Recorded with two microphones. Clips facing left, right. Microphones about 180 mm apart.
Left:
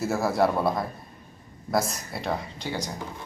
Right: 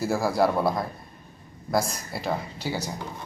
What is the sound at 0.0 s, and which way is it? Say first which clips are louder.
Speech: even; centre (ahead or behind).